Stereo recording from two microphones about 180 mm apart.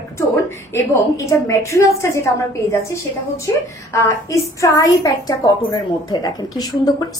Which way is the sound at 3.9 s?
15° left (ahead or behind).